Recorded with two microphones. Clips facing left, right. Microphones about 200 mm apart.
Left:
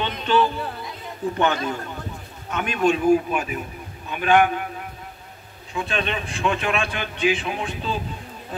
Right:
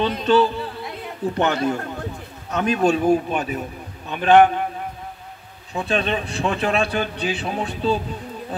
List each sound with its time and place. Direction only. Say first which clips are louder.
0.0 s a man's voice: right 4 dB; 35° right (ahead or behind)
1.5 s a man's voice: right 4 dB; 35° right (ahead or behind)
5.7 s a man's voice: right 4 dB; 35° right (ahead or behind)